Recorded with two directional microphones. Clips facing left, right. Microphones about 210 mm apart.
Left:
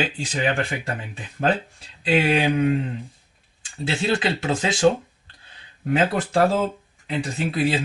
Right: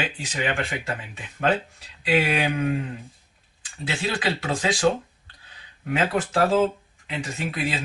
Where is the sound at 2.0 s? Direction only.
25° left (ahead or behind).